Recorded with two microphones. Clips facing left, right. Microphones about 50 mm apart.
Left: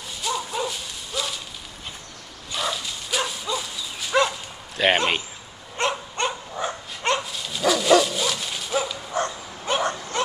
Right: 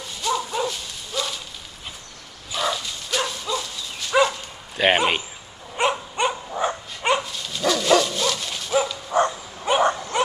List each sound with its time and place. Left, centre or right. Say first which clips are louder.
0.2 s dog: right 3 dB; centre
2.5 s dog: right 2 dB; centre
7.2 s dog: left 1 dB; centre
9.1 s dog: right 8 dB; centre